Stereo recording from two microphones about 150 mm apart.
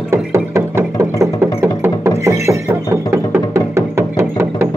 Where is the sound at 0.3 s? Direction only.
15° right (ahead or behind).